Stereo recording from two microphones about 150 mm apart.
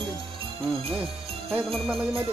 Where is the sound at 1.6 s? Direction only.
Centre (ahead or behind).